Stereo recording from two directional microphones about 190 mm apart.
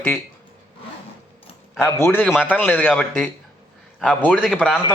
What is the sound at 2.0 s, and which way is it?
A man's voice, 10° left (ahead or behind).